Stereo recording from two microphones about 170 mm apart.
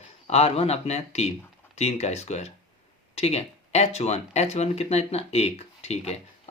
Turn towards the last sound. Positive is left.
turn(degrees=40)  # may be behind; listen again after turning